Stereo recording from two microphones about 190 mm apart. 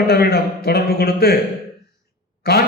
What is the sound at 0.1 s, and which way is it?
A man's voice, 55° left (ahead or behind).